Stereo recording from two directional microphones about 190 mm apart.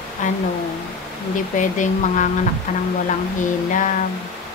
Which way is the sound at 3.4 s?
45° left (ahead or behind).